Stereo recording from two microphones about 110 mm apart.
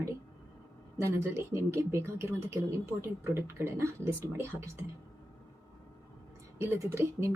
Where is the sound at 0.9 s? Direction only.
25° right (ahead or behind).